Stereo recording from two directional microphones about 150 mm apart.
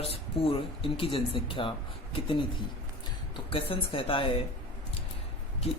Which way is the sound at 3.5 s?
40° left (ahead or behind).